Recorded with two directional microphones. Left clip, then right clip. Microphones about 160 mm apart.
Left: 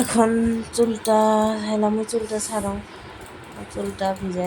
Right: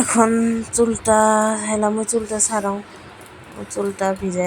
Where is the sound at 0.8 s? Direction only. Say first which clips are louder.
Right 3 dB; 20° right (ahead or behind).